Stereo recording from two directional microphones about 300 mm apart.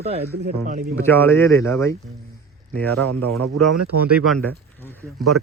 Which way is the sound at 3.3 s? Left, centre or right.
Right.